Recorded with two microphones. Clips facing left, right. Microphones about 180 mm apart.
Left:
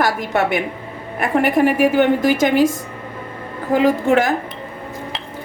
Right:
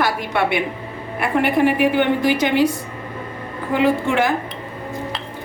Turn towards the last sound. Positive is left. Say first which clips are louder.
# left 2 dB
turn(degrees=40)  # may be behind; listen again after turning